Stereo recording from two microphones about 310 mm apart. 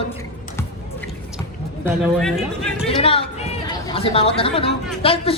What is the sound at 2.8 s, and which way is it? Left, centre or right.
A man's voice, centre.